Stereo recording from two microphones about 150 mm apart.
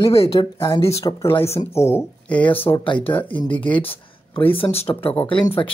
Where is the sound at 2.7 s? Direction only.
25° left (ahead or behind).